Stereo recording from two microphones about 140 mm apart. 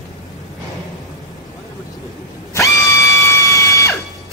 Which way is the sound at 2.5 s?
20° left (ahead or behind).